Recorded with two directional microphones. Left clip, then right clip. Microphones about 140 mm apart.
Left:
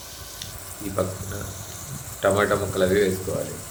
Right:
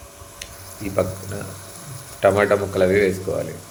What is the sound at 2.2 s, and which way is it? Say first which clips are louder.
Stir: right 4 dB; 15° right (ahead or behind).